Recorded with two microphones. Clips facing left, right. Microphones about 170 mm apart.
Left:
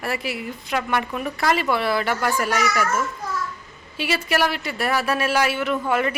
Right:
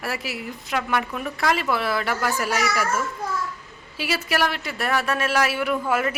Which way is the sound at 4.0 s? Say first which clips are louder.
Left 2 dB; centre (ahead or behind).